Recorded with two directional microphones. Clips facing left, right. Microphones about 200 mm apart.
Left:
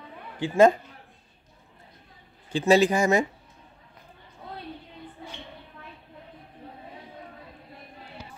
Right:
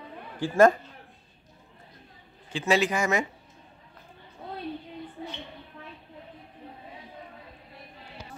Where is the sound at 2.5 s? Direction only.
35° left (ahead or behind).